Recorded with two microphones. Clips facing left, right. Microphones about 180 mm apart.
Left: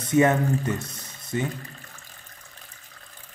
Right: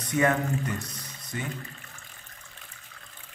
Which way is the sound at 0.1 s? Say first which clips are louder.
Left 5 dB; 25° left (ahead or behind).